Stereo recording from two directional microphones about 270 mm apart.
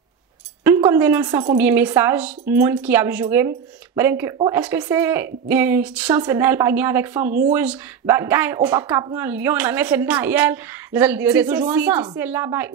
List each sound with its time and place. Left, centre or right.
0.7 s speech: centre